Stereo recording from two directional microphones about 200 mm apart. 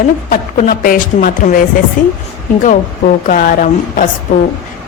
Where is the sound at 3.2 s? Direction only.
40° left (ahead or behind).